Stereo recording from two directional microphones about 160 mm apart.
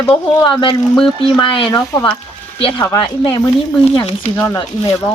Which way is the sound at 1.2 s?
30° left (ahead or behind).